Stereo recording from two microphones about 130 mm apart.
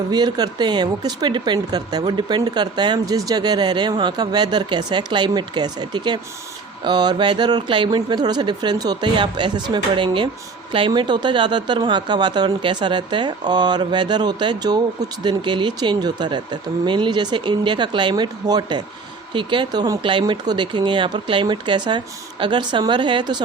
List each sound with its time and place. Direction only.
0.1 s speech: 35° right (ahead or behind)